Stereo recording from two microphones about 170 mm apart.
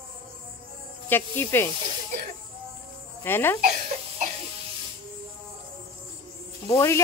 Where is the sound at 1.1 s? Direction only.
10° left (ahead or behind).